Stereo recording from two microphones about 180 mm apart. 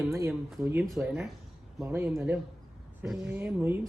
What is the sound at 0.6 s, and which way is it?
Speech, 10° right (ahead or behind).